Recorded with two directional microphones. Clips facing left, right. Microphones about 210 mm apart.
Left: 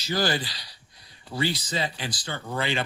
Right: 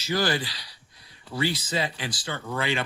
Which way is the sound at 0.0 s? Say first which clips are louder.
Even; 35° left (ahead or behind).